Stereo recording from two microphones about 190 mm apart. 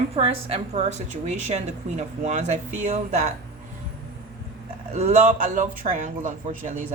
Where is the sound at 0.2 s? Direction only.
30° right (ahead or behind).